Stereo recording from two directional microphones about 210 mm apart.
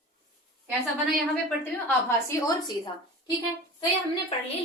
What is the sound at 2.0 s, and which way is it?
Speech, 15° left (ahead or behind).